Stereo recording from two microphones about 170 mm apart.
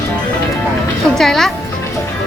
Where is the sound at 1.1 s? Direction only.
Centre (ahead or behind).